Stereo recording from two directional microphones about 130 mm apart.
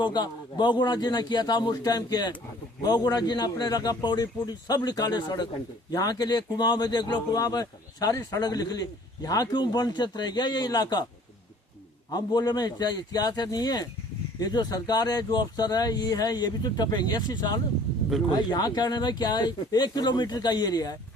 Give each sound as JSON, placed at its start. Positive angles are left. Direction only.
{"t": 0.0, "sound": "speech", "side_deg": 35}
{"t": 12.1, "sound": "speech", "side_deg": 30}